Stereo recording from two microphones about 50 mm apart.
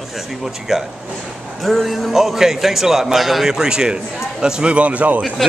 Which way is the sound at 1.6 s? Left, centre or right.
Centre.